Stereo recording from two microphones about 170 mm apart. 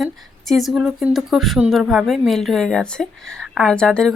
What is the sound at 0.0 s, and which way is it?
A woman's voice, centre (ahead or behind).